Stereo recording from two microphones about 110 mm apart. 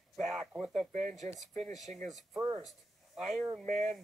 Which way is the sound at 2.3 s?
25° right (ahead or behind).